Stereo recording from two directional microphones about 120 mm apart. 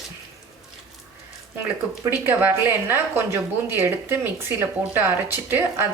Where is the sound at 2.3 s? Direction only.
20° right (ahead or behind).